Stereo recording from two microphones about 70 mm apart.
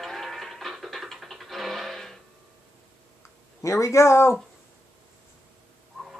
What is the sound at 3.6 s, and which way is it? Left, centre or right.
Speech, left.